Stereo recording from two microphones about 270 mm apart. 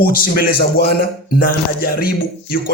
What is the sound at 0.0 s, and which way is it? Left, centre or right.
Speech, left.